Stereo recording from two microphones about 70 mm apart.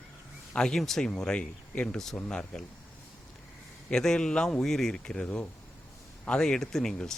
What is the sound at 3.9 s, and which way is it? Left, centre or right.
Speech, centre.